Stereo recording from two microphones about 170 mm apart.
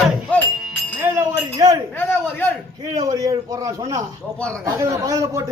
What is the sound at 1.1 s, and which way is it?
Speech, 20° right (ahead or behind).